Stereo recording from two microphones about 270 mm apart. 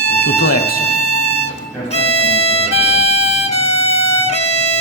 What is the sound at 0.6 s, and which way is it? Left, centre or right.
Music, left.